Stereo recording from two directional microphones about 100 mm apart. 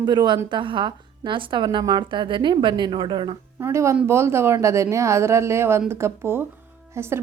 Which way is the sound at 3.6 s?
30° right (ahead or behind).